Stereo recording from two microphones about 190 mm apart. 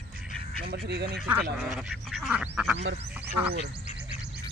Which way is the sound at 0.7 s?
60° right (ahead or behind).